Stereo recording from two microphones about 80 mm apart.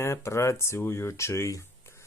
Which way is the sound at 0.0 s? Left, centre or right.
Left.